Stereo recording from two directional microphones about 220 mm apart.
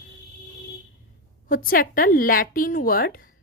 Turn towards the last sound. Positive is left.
turn(degrees=40)  # may be behind; listen again after turning